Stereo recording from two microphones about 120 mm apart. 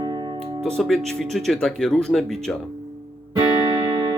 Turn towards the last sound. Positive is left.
turn(degrees=-30)  # may be behind; listen again after turning